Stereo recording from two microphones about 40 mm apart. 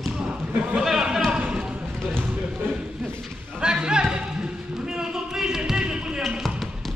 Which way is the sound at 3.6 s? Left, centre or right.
Right.